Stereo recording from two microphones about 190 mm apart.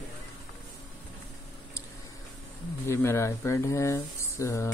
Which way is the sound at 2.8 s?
15° left (ahead or behind).